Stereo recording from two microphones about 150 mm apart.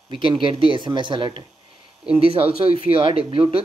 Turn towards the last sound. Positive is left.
turn(degrees=-35)  # may be behind; listen again after turning